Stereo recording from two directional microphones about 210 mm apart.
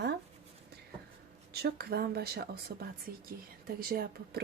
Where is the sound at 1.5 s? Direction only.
50° right (ahead or behind).